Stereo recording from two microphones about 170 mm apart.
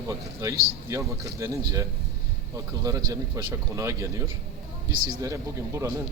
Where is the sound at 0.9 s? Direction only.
20° right (ahead or behind).